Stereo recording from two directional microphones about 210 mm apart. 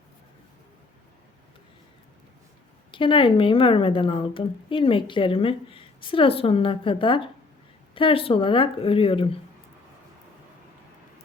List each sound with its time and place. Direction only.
2.9 s a woman's voice: 25° left (ahead or behind)